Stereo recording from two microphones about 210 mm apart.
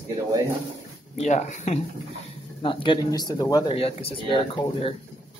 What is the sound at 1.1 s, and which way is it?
Speech, 35° left (ahead or behind).